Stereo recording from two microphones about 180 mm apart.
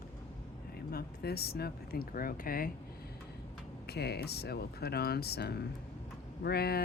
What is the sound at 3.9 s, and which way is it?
Speech, 65° left (ahead or behind).